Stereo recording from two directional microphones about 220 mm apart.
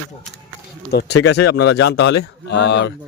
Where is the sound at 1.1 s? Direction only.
90° left.